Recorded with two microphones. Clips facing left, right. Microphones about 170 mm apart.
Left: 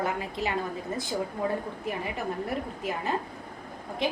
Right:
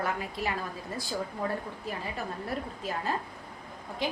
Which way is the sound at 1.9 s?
20° left (ahead or behind).